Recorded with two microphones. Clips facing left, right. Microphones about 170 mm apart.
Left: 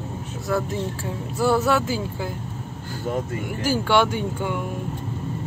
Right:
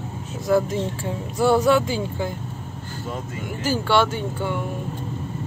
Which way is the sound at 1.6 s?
5° left (ahead or behind).